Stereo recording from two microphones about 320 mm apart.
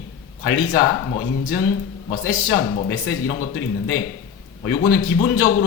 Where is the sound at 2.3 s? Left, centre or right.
Left.